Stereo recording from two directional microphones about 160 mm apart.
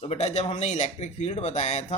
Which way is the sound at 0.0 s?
40° left (ahead or behind).